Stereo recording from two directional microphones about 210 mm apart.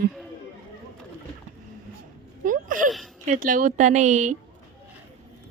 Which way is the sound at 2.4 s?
40° right (ahead or behind).